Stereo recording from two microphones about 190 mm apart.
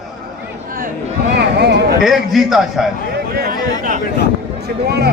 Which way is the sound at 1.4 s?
60° right (ahead or behind).